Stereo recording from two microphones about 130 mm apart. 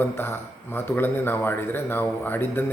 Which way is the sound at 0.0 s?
15° left (ahead or behind).